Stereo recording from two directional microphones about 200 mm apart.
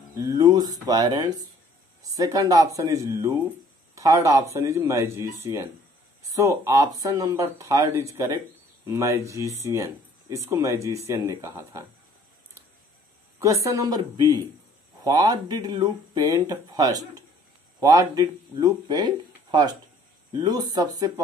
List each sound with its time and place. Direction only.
0.2 s speech: 20° right (ahead or behind)
6.3 s speech: 15° right (ahead or behind)
13.4 s speech: 15° right (ahead or behind)